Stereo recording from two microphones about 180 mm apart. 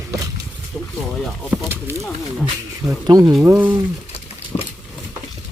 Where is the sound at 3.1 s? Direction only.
25° right (ahead or behind).